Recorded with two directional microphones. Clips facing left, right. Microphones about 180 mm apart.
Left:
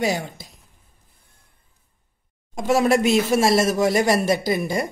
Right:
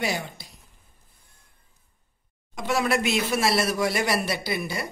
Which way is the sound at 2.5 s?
40° left (ahead or behind).